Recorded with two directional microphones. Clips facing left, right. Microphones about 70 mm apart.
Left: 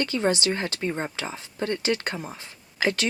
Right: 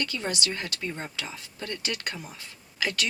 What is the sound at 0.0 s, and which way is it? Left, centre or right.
Speech, left.